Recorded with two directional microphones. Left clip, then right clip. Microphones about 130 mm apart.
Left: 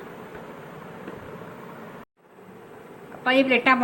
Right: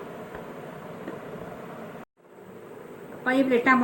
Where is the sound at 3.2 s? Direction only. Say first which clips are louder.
Left 3 dB; 30° left (ahead or behind).